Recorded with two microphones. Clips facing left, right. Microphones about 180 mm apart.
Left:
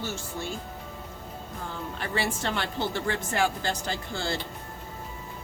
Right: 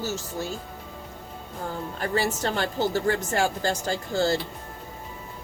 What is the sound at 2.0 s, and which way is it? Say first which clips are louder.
A woman's voice: right 4 dB; 40° right (ahead or behind).